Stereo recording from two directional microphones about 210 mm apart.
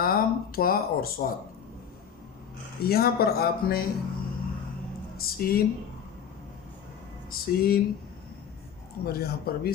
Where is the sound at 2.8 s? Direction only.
45° left (ahead or behind).